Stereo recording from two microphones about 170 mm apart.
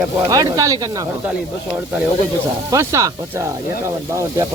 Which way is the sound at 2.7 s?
15° right (ahead or behind).